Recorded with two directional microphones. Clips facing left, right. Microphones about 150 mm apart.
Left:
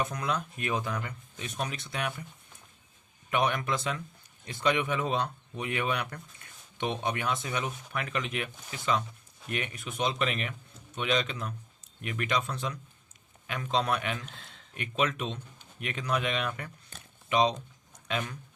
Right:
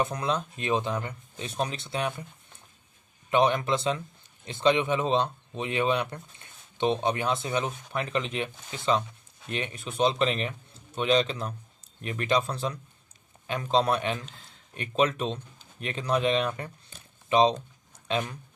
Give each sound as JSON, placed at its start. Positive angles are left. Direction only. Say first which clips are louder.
{"t": 0.0, "sound": "speech", "louder": "right 4 dB", "side_deg": -30}
{"t": 3.2, "sound": "speech", "louder": "right 5 dB", "side_deg": -25}
{"t": 17.2, "sound": "a sound", "louder": "right 4 dB", "side_deg": -30}